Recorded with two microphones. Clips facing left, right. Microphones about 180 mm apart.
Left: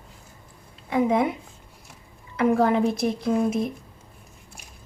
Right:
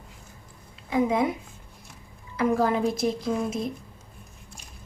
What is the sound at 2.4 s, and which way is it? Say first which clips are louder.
A woman's voice: left 3 dB; 60° left (ahead or behind).